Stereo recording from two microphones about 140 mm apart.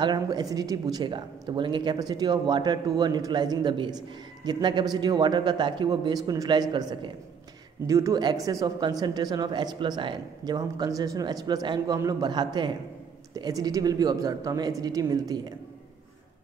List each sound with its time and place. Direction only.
0.0 s a woman's voice: 30° right (ahead or behind)